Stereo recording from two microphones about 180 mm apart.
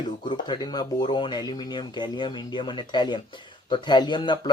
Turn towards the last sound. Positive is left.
turn(degrees=25)  # may be behind; listen again after turning